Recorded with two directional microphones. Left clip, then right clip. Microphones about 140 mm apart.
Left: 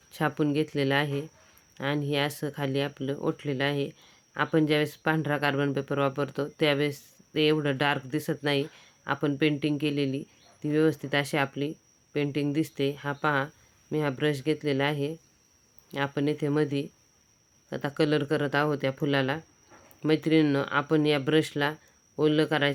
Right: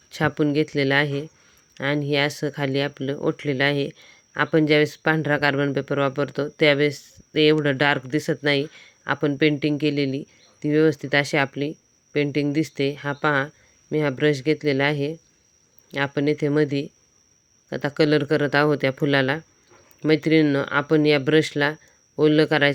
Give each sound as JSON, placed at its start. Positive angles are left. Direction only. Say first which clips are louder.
{"t": 0.1, "sound": "speech", "louder": "right 6 dB", "side_deg": -25}